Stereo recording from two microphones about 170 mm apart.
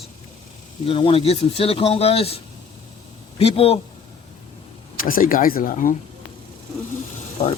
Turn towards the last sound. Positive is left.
turn(degrees=45)  # may be behind; listen again after turning